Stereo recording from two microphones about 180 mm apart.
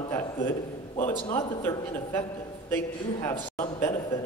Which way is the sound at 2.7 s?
15° left (ahead or behind).